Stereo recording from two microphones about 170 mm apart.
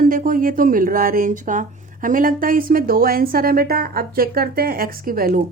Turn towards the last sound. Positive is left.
turn(degrees=-55)  # may be behind; listen again after turning